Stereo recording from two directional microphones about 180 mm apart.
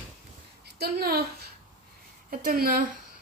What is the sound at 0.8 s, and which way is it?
A woman's voice, 60° right (ahead or behind).